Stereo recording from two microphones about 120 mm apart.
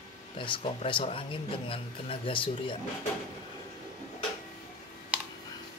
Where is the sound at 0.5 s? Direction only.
45° left (ahead or behind).